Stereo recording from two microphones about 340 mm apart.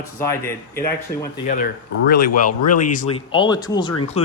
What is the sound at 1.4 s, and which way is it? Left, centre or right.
Speech, left.